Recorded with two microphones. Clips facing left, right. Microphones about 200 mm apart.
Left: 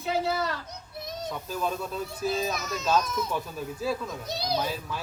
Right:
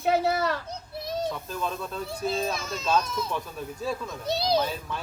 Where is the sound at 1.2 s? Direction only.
5° left (ahead or behind).